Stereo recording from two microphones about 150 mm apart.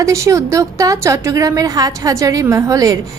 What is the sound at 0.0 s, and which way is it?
A woman's voice, 20° right (ahead or behind).